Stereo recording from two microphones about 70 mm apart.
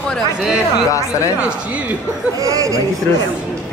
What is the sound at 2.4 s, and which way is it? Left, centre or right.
Speech, right.